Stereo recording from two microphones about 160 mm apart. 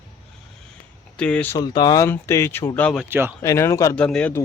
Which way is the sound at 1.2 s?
10° left (ahead or behind).